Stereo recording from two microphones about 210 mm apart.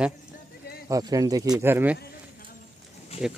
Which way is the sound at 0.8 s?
15° right (ahead or behind).